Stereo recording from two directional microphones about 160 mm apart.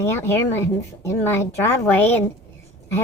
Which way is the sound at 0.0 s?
15° left (ahead or behind).